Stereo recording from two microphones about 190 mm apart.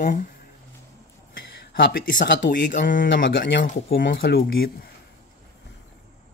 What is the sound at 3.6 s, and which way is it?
Speech, 50° left (ahead or behind).